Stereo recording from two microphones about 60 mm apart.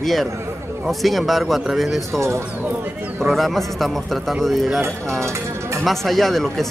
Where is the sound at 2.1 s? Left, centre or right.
Right.